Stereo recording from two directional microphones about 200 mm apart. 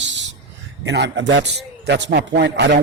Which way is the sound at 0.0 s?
65° right (ahead or behind).